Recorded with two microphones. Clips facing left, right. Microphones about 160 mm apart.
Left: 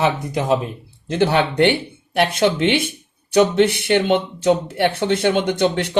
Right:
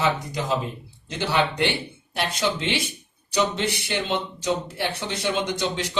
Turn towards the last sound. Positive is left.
turn(degrees=60)  # may be behind; listen again after turning